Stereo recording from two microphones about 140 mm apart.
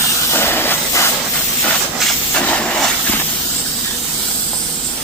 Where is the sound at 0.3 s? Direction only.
15° left (ahead or behind).